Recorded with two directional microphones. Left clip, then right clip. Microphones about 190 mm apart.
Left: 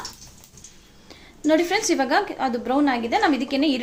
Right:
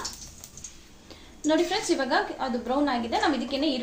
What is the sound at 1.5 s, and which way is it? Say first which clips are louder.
A woman's voice: left 5 dB; 45° left (ahead or behind).